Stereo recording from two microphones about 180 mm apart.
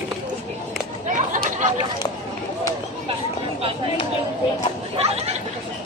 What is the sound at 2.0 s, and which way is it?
Speech, 20° left (ahead or behind).